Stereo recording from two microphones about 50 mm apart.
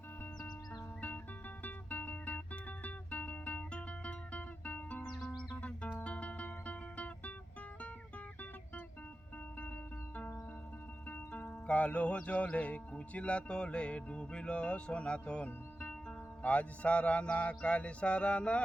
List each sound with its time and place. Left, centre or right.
1.6 s music: left
5.0 s music: centre
5.5 s music: left
11.1 s music: left
11.6 s speech: left